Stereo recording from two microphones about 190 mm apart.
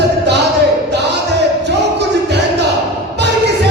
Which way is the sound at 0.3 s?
60° right (ahead or behind).